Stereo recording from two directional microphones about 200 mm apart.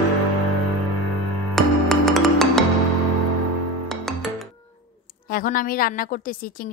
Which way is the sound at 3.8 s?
Centre (ahead or behind).